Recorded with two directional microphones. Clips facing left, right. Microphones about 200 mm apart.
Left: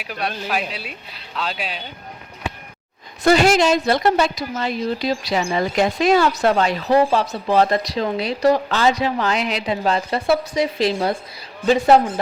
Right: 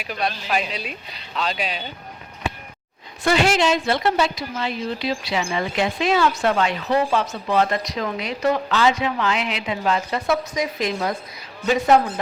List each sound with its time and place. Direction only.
0.1 s speech: 5° left (ahead or behind)
3.2 s a woman's voice: 40° left (ahead or behind)